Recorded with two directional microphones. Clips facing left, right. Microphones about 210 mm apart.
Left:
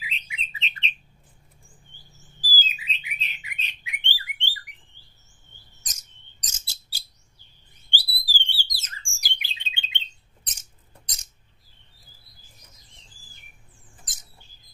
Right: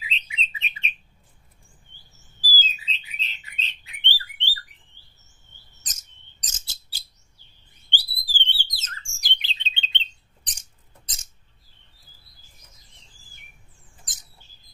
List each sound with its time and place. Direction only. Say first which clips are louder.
0.0 s bird: right 3 dB; 25° right (ahead or behind)
0.7 s bird: even; 10° right (ahead or behind)
2.5 s bird: even; 15° left (ahead or behind)
5.8 s bird: even; 10° left (ahead or behind)